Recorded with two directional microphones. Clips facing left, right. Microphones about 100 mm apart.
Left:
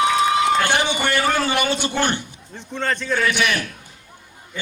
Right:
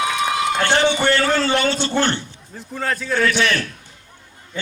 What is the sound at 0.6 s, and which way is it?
A man's voice, 15° left (ahead or behind).